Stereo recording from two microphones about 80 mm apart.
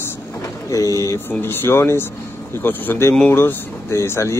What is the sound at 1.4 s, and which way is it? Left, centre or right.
Speech, left.